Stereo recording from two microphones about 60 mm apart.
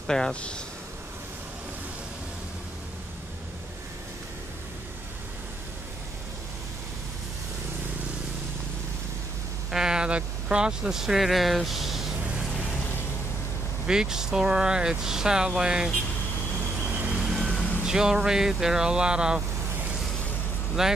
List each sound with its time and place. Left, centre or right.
0.0 s speech: centre
9.7 s speech: centre
13.8 s speech: centre
16.9 s vehicle: right
17.4 s music: centre
17.8 s speech: centre
20.8 s speech: centre